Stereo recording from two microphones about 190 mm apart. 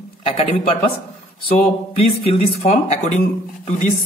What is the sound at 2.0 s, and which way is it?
Speech, 30° left (ahead or behind).